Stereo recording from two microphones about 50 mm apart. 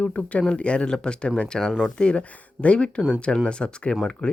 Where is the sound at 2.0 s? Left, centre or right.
Left.